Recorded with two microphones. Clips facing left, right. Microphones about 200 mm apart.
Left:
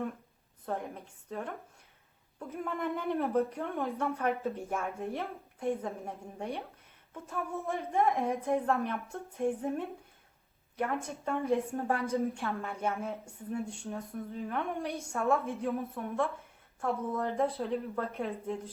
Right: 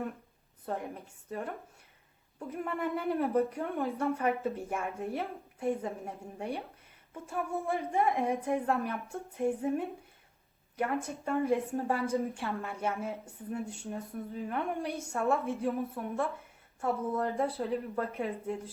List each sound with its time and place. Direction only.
2.5 s a woman's voice: centre (ahead or behind)
3.2 s a woman's voice: 15° right (ahead or behind)
3.7 s a woman's voice: centre (ahead or behind)
10.9 s a woman's voice: centre (ahead or behind)